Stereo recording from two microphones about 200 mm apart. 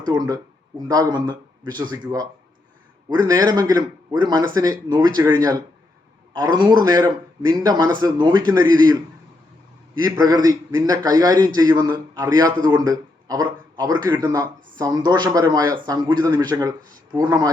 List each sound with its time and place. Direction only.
0.0 s speech: 20° right (ahead or behind)
10.0 s speech: 20° right (ahead or behind)